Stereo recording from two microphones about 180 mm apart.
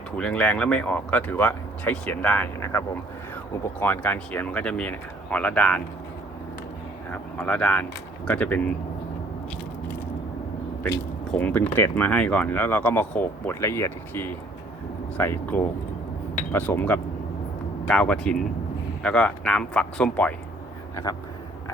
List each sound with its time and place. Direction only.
0.2 s speech: 5° left (ahead or behind)
7.1 s speech: 10° left (ahead or behind)
11.3 s speech: 10° left (ahead or behind)
20.9 s speech: 20° left (ahead or behind)